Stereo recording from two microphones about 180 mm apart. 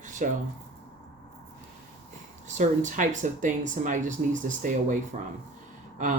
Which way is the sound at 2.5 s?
45° right (ahead or behind).